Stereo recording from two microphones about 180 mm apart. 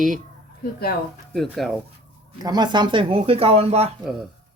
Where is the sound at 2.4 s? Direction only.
25° right (ahead or behind).